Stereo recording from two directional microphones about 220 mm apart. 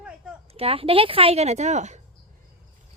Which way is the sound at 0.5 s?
25° right (ahead or behind).